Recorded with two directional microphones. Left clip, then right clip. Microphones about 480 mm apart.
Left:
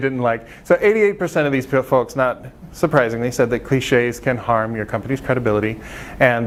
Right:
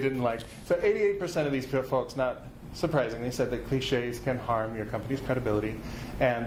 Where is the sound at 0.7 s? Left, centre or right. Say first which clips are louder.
Left 11 dB; left.